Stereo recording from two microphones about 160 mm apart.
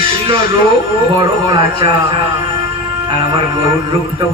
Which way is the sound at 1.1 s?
30° right (ahead or behind).